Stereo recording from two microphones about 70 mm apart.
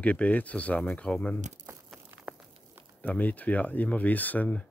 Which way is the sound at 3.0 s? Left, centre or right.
Left.